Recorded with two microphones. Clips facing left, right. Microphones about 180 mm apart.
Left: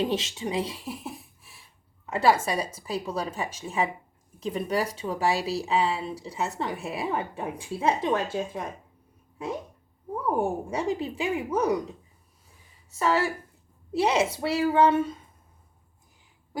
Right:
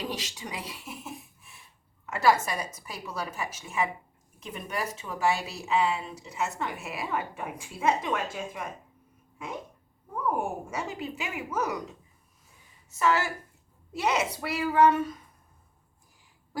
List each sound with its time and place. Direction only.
0.0 s speech: 25° left (ahead or behind)
10.2 s a woman's voice: 30° left (ahead or behind)